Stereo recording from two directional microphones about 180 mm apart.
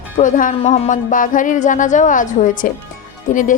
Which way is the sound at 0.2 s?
45° left (ahead or behind).